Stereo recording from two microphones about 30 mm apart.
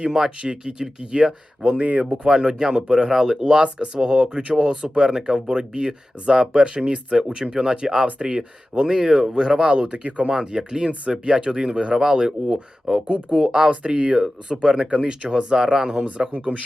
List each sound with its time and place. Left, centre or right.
0.0 s speech: right
1.8 s speech: right
2.2 s speech: right
9.9 s speech: right
10.2 s speech: right
11.0 s speech: right
11.9 s speech: right
12.4 s speech: right
12.9 s speech: right
13.7 s speech: right
16.0 s speech: right